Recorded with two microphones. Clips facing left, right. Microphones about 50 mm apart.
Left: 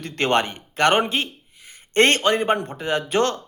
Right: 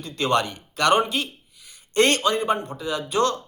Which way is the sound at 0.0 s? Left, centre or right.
Left.